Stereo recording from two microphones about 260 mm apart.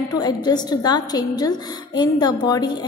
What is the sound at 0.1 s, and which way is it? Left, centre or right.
A woman's voice, centre.